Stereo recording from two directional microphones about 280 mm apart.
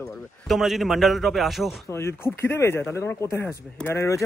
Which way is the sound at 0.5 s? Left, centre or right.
Centre.